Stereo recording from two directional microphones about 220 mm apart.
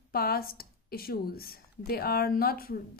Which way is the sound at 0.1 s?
45° left (ahead or behind).